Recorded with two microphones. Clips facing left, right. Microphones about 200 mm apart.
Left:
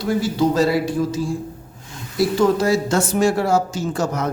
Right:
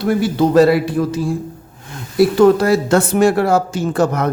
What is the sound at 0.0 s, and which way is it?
Speech, 60° right (ahead or behind).